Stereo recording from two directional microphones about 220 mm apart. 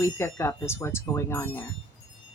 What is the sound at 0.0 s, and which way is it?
Speech, 10° left (ahead or behind).